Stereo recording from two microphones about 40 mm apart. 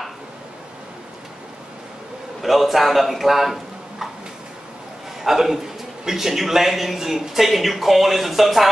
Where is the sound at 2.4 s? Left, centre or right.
Centre.